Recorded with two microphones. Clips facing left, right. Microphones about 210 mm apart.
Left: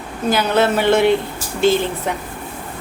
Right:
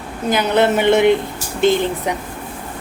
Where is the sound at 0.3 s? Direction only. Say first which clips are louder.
Right 1 dB; 20° right (ahead or behind).